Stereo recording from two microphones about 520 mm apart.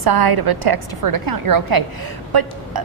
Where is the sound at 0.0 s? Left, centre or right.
Right.